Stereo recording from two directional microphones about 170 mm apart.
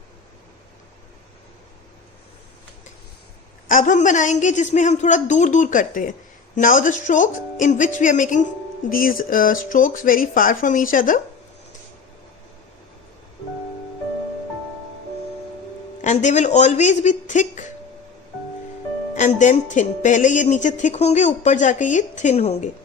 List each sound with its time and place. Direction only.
3.7 s a woman's voice: 50° left (ahead or behind)
16.0 s a woman's voice: 45° left (ahead or behind)
19.1 s a woman's voice: 45° left (ahead or behind)